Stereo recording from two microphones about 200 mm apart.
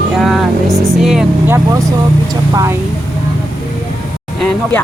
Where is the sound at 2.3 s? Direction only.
15° right (ahead or behind).